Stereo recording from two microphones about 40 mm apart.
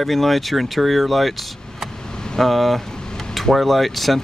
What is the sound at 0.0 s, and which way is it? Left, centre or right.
Speech, centre.